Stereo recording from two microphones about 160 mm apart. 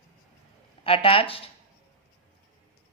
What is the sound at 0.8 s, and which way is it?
Speech, 35° left (ahead or behind).